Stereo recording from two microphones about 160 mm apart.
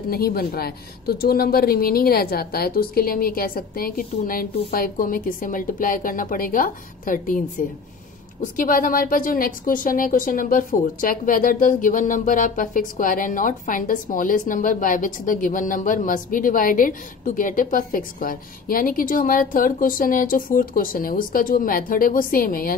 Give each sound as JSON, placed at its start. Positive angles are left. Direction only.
{"t": 0.1, "sound": "a woman's voice", "side_deg": 70}